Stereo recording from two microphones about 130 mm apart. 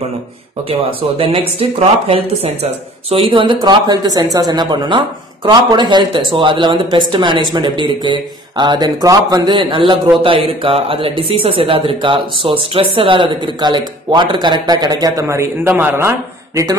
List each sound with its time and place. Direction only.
0.7 s speech: 45° right (ahead or behind); by 9.6 s 30° right (ahead or behind)
9.6 s speech: 40° right (ahead or behind); by 16.1 s 15° right (ahead or behind)